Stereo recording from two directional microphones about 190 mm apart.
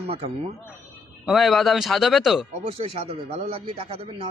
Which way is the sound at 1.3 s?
Centre (ahead or behind).